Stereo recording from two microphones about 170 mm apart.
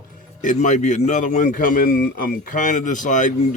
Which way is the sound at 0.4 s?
45° left (ahead or behind).